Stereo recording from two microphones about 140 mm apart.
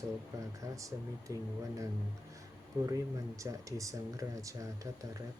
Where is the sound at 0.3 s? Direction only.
20° right (ahead or behind).